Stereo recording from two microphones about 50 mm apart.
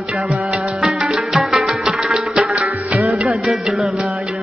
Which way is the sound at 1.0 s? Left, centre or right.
Centre.